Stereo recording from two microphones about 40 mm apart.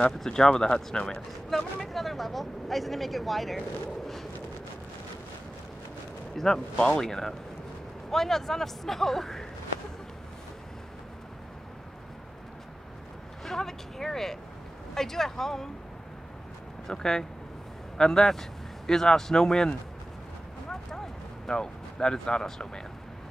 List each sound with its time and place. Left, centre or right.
0.3 s speech: centre
6.3 s a man's voice: centre
13.5 s a sound: centre
15.0 s a man's voice: centre
16.8 s a man's voice: centre
20.9 s a sound: centre